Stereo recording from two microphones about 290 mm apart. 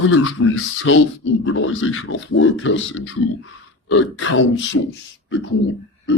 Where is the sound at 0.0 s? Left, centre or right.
Left.